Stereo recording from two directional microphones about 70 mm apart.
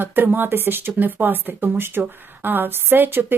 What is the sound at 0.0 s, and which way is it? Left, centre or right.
Speech, right.